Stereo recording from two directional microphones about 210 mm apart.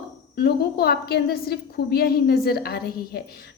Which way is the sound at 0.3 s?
50° left (ahead or behind).